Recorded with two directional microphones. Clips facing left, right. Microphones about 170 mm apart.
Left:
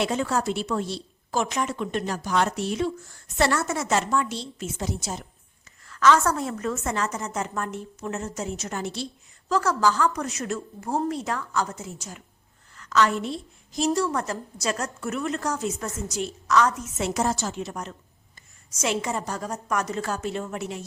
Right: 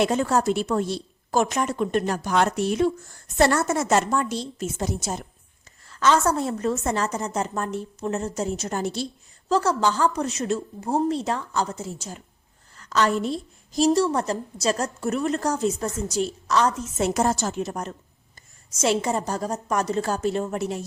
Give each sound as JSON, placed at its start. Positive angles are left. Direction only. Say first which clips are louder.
{"t": 0.0, "sound": "a woman's voice", "louder": "right 4 dB", "side_deg": -45}
{"t": 3.3, "sound": "a woman's voice", "louder": "right 4 dB", "side_deg": -40}
{"t": 5.8, "sound": "a woman's voice", "louder": "even", "side_deg": -30}
{"t": 9.5, "sound": "a woman's voice", "louder": "right 1 dB", "side_deg": -30}
{"t": 17.0, "sound": "a woman's voice", "louder": "right 3 dB", "side_deg": -45}
{"t": 18.8, "sound": "a woman's voice", "louder": "right 4 dB", "side_deg": -35}